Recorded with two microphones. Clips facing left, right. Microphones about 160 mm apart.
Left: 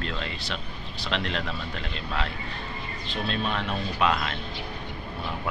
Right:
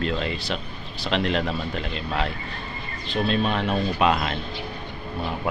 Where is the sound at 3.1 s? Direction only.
5° right (ahead or behind).